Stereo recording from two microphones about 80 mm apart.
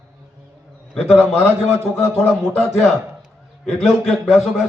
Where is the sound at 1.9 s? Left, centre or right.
Left.